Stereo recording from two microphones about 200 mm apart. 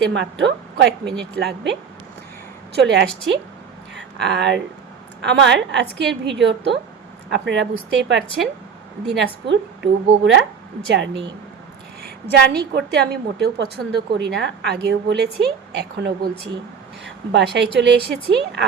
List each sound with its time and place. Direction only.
0.1 s a woman's voice: 65° right (ahead or behind)
2.7 s a woman's voice: 60° right (ahead or behind)
12.5 s a woman's voice: 55° right (ahead or behind)